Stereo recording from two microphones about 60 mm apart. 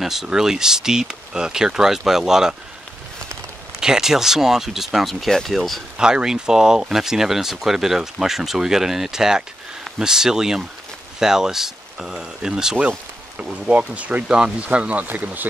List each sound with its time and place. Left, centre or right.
0.0 s speech: centre
3.8 s speech: centre
5.9 s speech: centre
13.4 s speech: right
14.2 s speech: centre; by 15.4 s right